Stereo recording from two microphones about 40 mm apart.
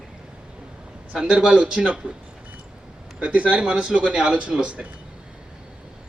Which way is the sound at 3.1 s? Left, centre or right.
Right.